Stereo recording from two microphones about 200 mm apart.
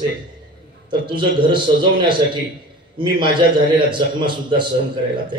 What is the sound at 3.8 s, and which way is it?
Speech, 25° right (ahead or behind).